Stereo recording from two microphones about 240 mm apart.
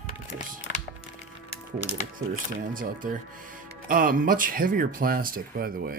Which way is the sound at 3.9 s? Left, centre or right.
Right.